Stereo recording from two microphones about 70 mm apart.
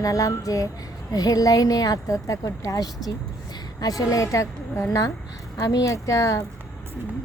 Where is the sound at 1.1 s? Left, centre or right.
Left.